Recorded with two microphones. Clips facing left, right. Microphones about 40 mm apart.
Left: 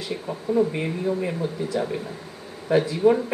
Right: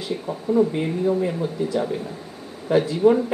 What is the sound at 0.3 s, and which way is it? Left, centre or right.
Speech, centre.